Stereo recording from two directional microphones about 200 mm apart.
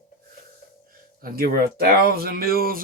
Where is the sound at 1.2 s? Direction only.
45° right (ahead or behind).